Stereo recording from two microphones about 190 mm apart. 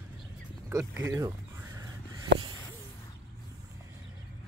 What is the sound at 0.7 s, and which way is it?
Speech, 15° right (ahead or behind).